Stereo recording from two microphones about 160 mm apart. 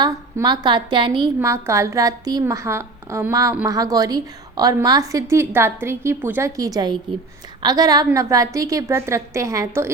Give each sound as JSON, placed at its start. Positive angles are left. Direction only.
{"t": 0.0, "sound": "a woman's voice", "side_deg": -25}
{"t": 1.4, "sound": "a woman's voice", "side_deg": -15}